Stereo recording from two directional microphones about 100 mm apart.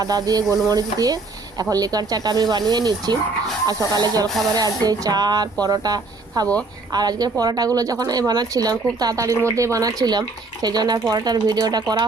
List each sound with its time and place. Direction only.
0.0 s a woman's voice: 40° right (ahead or behind)